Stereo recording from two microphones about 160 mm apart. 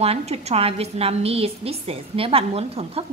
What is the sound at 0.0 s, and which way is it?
A woman's voice, 40° right (ahead or behind).